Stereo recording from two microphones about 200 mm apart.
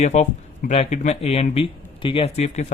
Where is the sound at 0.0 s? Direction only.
35° left (ahead or behind).